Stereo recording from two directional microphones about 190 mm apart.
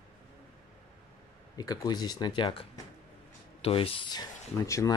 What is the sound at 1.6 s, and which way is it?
Speech, 20° left (ahead or behind).